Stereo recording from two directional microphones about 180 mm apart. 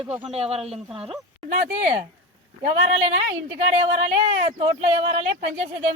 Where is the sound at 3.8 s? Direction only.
30° right (ahead or behind).